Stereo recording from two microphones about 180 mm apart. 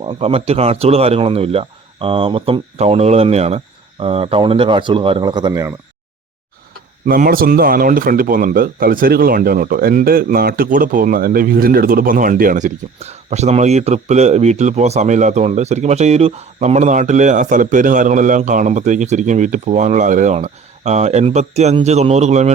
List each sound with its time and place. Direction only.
0.0 s speech: 30° right (ahead or behind)
7.1 s speech: 55° right (ahead or behind)